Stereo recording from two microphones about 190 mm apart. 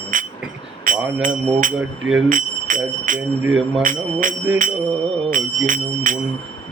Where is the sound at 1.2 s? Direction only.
45° right (ahead or behind).